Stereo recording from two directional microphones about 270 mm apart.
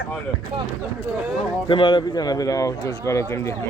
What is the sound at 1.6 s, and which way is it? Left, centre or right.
A man's voice, centre.